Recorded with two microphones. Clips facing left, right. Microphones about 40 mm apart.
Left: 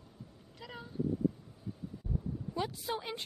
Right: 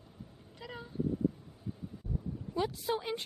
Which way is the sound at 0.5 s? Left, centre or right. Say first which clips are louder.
Right 2 dB; centre.